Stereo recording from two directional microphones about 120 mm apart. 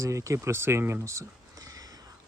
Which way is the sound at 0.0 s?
25° right (ahead or behind).